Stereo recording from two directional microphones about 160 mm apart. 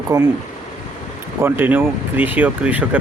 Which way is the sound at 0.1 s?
15° right (ahead or behind).